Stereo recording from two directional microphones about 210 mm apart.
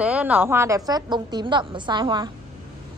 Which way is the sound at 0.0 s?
5° right (ahead or behind).